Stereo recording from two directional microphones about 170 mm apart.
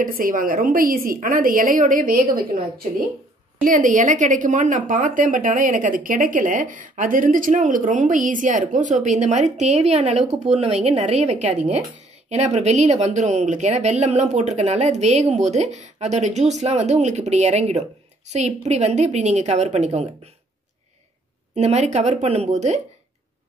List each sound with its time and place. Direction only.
0.0 s a woman's voice: 55° right (ahead or behind)
3.6 s a woman's voice: 50° right (ahead or behind)
21.5 s speech: 40° right (ahead or behind)